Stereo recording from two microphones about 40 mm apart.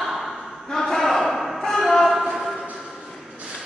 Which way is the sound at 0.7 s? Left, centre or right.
Centre.